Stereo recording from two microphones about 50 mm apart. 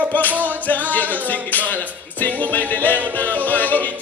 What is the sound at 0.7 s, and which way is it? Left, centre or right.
Music, left.